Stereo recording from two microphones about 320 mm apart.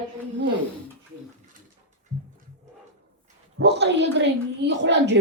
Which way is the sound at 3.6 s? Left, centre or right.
Right.